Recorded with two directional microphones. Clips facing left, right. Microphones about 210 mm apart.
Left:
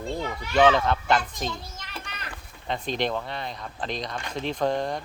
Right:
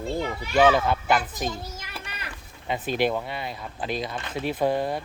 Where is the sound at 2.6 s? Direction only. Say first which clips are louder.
Right 3 dB; 5° right (ahead or behind).